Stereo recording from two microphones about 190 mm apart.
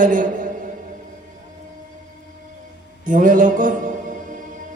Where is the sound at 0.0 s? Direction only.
45° right (ahead or behind).